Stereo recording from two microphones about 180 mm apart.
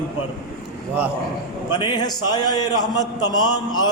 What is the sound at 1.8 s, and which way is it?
A man's voice, 25° left (ahead or behind).